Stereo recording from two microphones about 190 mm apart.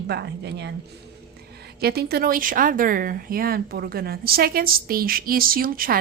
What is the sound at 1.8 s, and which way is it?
Speech, 55° right (ahead or behind).